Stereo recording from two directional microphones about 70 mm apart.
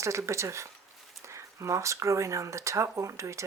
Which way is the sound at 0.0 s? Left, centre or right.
Right.